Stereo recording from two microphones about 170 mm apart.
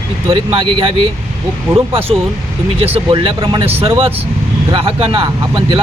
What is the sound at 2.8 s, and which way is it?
Speech, 30° right (ahead or behind).